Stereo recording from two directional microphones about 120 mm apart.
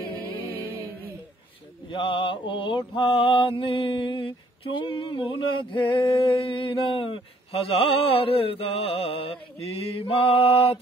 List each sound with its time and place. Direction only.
1.9 s mantra: 40° left (ahead or behind)